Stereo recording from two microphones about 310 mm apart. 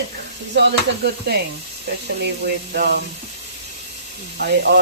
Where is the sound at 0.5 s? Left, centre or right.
Right.